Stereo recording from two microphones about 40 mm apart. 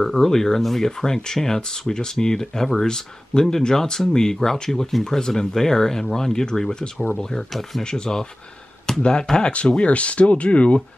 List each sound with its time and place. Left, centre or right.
0.0 s speech: centre
8.9 s a sound: centre
9.5 s speech: left